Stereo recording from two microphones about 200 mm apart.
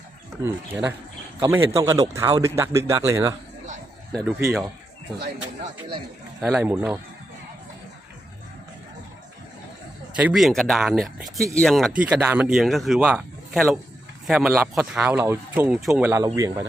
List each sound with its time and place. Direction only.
0.4 s speech: 10° right (ahead or behind)
4.1 s speech: centre (ahead or behind)
6.5 s speech: 10° right (ahead or behind)
10.2 s speech: 5° right (ahead or behind)